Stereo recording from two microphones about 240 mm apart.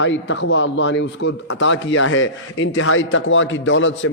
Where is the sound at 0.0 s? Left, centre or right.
Left.